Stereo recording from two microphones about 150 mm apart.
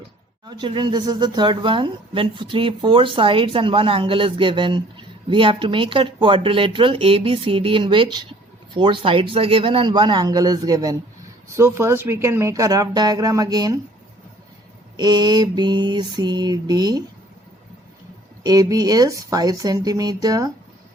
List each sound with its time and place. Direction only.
0.4 s speech: 30° right (ahead or behind)
14.9 s speech: 30° right (ahead or behind)
18.4 s speech: 25° right (ahead or behind)